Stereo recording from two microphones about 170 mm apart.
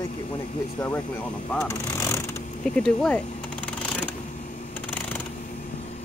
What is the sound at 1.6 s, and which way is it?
Speech, 15° left (ahead or behind).